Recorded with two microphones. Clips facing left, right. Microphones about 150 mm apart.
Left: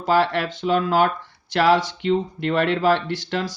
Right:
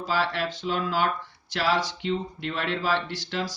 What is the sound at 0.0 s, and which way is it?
Speech, 55° left (ahead or behind).